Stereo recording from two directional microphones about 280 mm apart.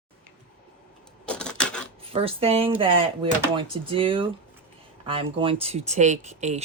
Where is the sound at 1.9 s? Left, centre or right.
Centre.